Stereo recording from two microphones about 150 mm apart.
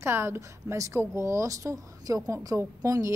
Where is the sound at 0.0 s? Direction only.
15° right (ahead or behind).